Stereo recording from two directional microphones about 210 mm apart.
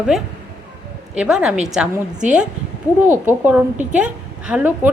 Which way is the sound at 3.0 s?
10° right (ahead or behind).